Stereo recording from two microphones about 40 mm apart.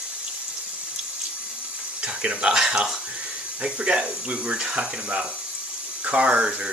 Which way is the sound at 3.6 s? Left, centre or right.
Right.